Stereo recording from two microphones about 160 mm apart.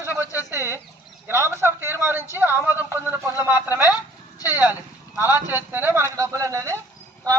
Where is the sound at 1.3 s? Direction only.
15° right (ahead or behind).